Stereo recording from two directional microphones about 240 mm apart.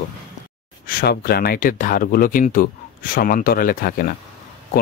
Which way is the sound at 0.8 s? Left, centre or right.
Left.